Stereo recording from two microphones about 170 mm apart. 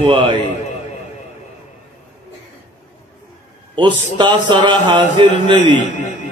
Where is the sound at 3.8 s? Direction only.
30° right (ahead or behind).